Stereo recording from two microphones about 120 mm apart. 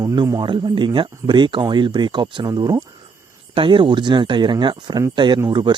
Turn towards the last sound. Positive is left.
turn(degrees=-40)  # may be behind; listen again after turning